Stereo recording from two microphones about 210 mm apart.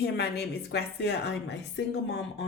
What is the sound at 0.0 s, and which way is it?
A woman's voice, 50° left (ahead or behind).